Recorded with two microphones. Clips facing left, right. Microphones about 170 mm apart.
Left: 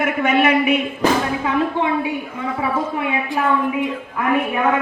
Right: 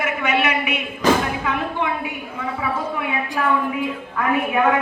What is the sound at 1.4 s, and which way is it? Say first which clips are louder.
Speech: left 4 dB; 30° left (ahead or behind).